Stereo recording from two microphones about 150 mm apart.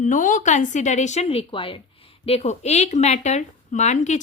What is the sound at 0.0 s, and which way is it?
A woman's voice, 55° left (ahead or behind).